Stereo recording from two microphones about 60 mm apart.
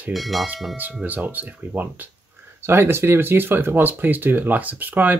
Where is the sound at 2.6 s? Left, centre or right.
Right.